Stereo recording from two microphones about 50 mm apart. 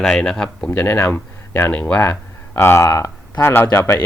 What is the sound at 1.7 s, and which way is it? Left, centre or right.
Speech, left.